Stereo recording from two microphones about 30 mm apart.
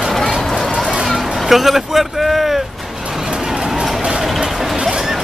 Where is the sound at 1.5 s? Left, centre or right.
Centre.